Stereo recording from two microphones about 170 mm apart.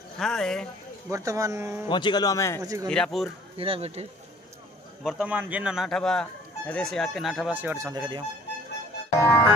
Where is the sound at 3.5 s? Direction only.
35° right (ahead or behind).